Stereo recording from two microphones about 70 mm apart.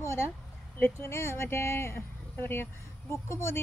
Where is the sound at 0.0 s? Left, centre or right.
Left.